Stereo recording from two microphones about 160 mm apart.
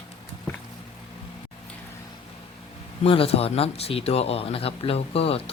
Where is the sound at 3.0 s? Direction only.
35° left (ahead or behind).